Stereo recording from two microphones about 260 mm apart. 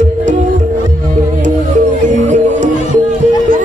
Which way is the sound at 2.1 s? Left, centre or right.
Right.